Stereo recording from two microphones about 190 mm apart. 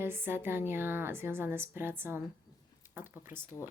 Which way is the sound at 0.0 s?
10° right (ahead or behind).